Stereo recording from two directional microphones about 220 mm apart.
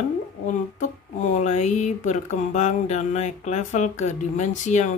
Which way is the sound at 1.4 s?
30° left (ahead or behind).